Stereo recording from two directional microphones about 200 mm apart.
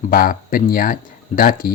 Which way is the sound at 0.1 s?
45° left (ahead or behind).